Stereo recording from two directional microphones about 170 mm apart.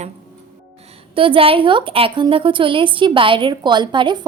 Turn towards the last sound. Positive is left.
turn(degrees=-25)  # may be behind; listen again after turning